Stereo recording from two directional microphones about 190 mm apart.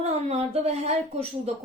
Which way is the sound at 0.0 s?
35° right (ahead or behind).